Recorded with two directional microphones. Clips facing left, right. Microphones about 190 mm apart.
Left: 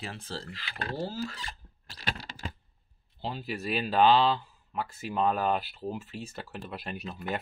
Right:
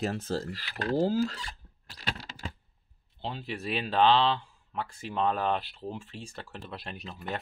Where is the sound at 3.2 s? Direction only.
5° left (ahead or behind).